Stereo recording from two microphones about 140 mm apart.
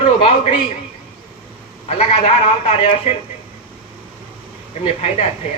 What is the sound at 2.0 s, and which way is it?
A man's voice, 50° left (ahead or behind).